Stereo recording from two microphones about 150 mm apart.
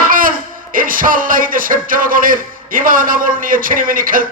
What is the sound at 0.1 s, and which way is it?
A man's voice, 65° right (ahead or behind).